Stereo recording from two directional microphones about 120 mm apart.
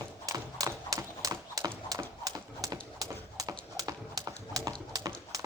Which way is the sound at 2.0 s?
30° right (ahead or behind).